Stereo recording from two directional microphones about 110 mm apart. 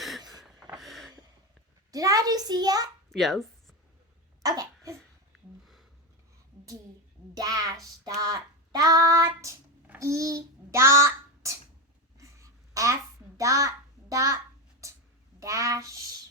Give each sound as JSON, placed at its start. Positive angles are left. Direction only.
{"t": 0.3, "sound": "snort", "side_deg": 0}
{"t": 0.8, "sound": "a sound", "side_deg": 0}
{"t": 1.9, "sound": "child singing", "side_deg": -35}
{"t": 3.1, "sound": "bow-wow", "side_deg": 0}
{"t": 4.4, "sound": "cough", "side_deg": -30}
{"t": 7.3, "sound": "child singing", "side_deg": -35}
{"t": 10.0, "sound": "a child's voice", "side_deg": -30}
{"t": 12.1, "sound": "a sound", "side_deg": -30}
{"t": 15.4, "sound": "speech", "side_deg": -30}